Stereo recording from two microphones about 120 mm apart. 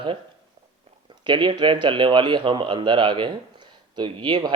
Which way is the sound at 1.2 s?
45° right (ahead or behind).